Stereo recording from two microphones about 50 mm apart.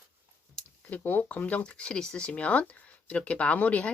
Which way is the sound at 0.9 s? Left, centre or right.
Left.